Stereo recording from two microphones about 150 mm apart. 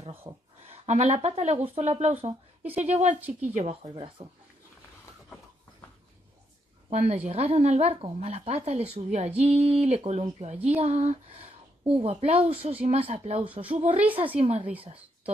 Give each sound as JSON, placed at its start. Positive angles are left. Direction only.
{"t": 0.1, "sound": "speech", "side_deg": -15}
{"t": 0.7, "sound": "a woman's voice", "side_deg": -50}
{"t": 3.1, "sound": "speech", "side_deg": -10}
{"t": 3.5, "sound": "a woman's voice", "side_deg": -50}
{"t": 6.9, "sound": "a woman's voice", "side_deg": -45}